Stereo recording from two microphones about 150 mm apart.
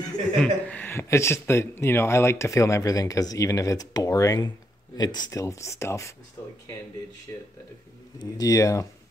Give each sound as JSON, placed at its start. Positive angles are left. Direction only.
{"t": 0.4, "sound": "speech", "side_deg": 10}
{"t": 6.4, "sound": "a sound", "side_deg": 15}
{"t": 7.3, "sound": "speech", "side_deg": 20}